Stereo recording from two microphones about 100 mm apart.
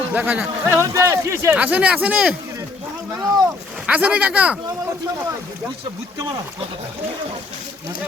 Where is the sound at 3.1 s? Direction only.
40° right (ahead or behind).